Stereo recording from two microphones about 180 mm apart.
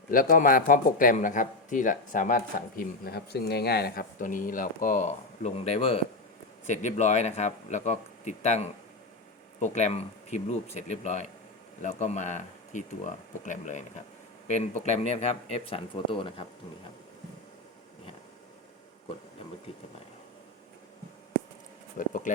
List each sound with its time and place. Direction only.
0.1 s speech: 50° left (ahead or behind); by 16.5 s 30° left (ahead or behind)
21.9 s speech: 45° left (ahead or behind)